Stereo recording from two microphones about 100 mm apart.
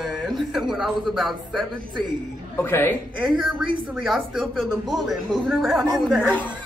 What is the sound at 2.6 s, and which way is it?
Speech, 20° left (ahead or behind).